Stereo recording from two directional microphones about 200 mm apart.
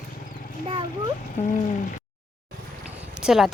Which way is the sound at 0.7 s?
25° right (ahead or behind).